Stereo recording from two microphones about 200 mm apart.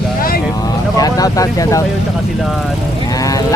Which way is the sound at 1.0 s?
20° left (ahead or behind).